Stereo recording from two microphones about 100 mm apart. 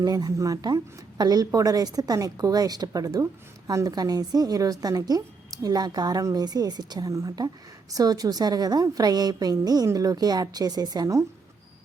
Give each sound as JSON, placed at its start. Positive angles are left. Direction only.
{"t": 0.0, "sound": "a woman's voice", "side_deg": -40}